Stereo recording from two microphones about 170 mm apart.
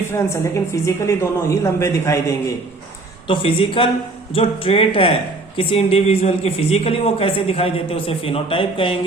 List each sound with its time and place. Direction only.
0.1 s a woman's voice: 15° left (ahead or behind)
3.2 s a man's voice: 30° left (ahead or behind)